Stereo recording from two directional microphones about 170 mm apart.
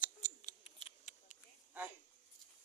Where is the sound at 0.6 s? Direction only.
45° left (ahead or behind).